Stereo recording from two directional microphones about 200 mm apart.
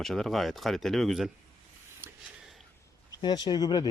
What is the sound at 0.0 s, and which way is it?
Speech, centre (ahead or behind).